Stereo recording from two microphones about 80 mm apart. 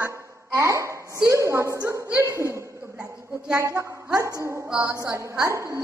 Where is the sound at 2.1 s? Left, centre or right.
Right.